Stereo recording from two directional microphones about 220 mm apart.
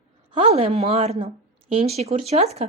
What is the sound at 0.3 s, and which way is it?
A woman's voice, 25° right (ahead or behind).